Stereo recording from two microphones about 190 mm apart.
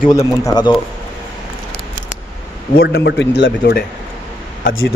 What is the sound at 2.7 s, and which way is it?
A man's voice, 55° left (ahead or behind).